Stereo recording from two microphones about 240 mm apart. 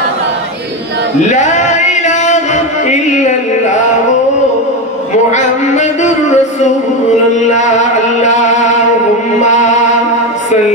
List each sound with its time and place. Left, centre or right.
1.3 s music: left
5.3 s music: left
7.4 s chant: left
9.4 s music: left